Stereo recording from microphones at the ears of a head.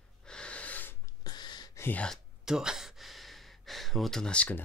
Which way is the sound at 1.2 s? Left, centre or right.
Left.